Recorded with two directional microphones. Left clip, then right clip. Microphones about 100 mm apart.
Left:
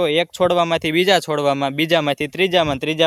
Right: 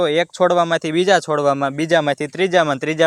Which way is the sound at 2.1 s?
55° left (ahead or behind).